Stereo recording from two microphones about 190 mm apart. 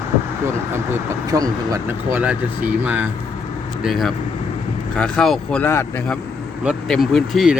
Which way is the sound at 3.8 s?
Centre (ahead or behind).